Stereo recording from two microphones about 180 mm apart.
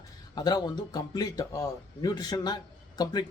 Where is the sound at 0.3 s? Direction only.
20° left (ahead or behind).